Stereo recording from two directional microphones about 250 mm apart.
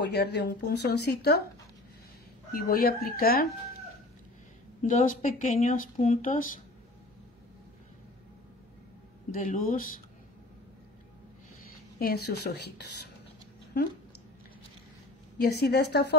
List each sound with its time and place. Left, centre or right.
0.0 s speech: left
2.5 s speech: left
4.8 s speech: left
9.3 s speech: left
11.6 s a sound: left
12.3 s speech: left
15.3 s speech: left